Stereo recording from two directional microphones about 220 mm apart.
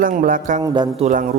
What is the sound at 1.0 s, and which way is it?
Speech, 35° right (ahead or behind).